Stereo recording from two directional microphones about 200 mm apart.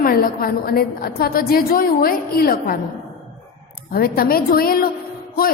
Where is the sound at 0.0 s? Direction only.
45° left (ahead or behind).